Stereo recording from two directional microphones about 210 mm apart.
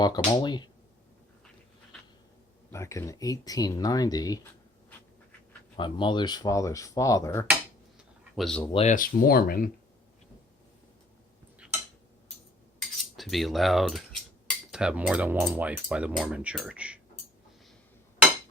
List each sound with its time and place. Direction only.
0.0 s speech: 20° left (ahead or behind)
2.6 s speech: 15° left (ahead or behind)
5.7 s speech: 20° left (ahead or behind)
7.9 s a sound: centre (ahead or behind)
8.6 s speech: 30° left (ahead or behind); by 9.6 s 45° left (ahead or behind)
11.6 s tick-tock: 5° right (ahead or behind)
13.1 s a sound: centre (ahead or behind)
14.7 s speech: 5° right (ahead or behind)